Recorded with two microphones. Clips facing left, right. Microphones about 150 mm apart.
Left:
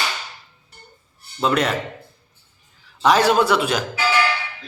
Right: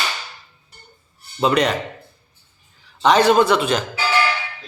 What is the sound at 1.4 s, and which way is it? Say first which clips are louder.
Speech: right 2 dB; 5° left (ahead or behind).